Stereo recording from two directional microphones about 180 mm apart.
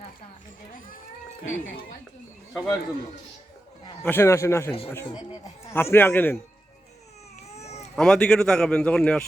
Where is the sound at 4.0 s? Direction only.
10° left (ahead or behind).